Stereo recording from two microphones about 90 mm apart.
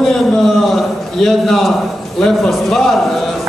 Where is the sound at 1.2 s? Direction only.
5° left (ahead or behind).